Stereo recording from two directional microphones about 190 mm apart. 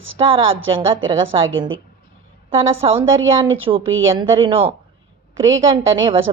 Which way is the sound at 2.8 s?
30° right (ahead or behind).